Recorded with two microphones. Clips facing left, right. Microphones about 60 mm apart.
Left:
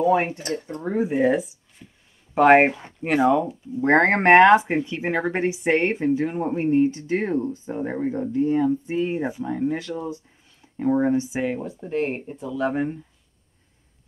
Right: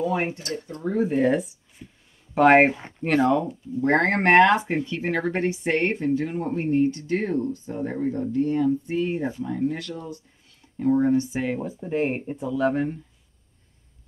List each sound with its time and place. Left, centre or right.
0.0 s speech: left
1.0 s speech: centre
3.8 s speech: left
11.1 s speech: centre
12.1 s speech: centre
12.4 s speech: centre